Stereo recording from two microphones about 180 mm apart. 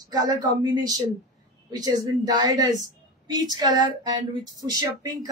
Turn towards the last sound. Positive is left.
turn(degrees=-20)  # may be behind; listen again after turning